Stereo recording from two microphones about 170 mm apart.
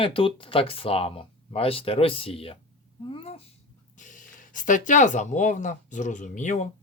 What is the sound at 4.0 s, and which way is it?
Speech, 50° left (ahead or behind).